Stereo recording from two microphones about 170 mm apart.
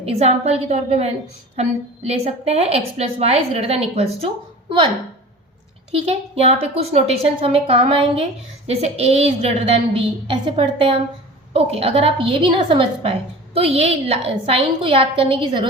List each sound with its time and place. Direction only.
0.0 s a woman's voice: 35° right (ahead or behind)
5.9 s a woman's voice: 35° right (ahead or behind)